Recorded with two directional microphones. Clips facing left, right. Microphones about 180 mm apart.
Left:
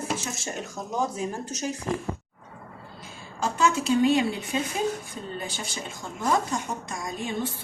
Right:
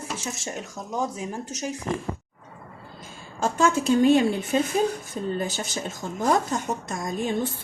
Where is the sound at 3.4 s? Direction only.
45° right (ahead or behind).